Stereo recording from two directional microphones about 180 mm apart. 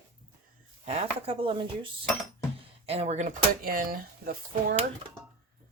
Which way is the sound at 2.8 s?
35° right (ahead or behind).